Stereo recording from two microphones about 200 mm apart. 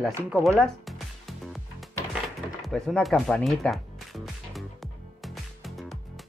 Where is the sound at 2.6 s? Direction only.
Centre (ahead or behind).